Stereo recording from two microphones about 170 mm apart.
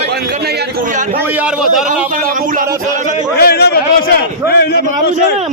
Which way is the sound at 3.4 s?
70° left (ahead or behind).